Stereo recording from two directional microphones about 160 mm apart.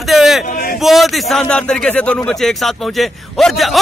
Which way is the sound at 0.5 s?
65° left (ahead or behind).